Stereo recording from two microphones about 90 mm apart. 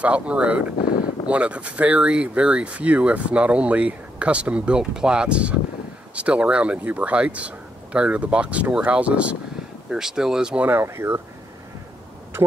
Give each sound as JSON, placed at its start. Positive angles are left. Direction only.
{"t": 0.0, "sound": "speech", "side_deg": -15}
{"t": 10.7, "sound": "speech", "side_deg": -30}